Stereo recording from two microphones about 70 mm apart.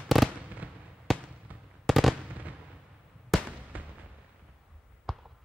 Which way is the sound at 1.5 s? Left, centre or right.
Right.